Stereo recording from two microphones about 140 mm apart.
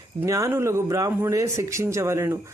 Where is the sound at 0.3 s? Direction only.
20° right (ahead or behind).